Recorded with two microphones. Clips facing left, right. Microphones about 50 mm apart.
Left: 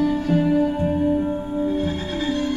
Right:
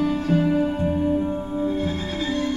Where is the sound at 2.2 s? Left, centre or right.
Left.